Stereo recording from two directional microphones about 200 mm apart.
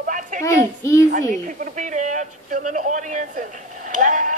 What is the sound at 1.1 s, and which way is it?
Speech, 40° right (ahead or behind).